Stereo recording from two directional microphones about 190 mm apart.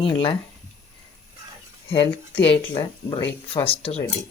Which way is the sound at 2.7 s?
25° left (ahead or behind).